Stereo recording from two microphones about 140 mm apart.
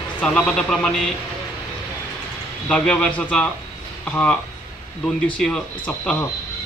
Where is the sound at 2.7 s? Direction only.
10° left (ahead or behind).